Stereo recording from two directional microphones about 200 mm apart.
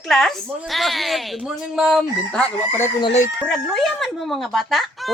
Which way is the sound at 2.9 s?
25° left (ahead or behind).